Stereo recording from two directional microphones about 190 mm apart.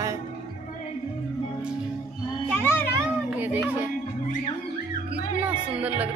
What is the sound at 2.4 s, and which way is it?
Children playing, 10° left (ahead or behind).